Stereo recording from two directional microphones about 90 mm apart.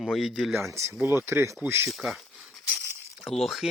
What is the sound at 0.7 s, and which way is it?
Speech, 35° right (ahead or behind).